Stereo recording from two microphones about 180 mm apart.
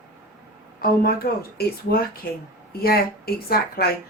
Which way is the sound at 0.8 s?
55° left (ahead or behind).